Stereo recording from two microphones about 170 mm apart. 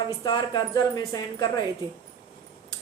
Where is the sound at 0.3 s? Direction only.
25° left (ahead or behind).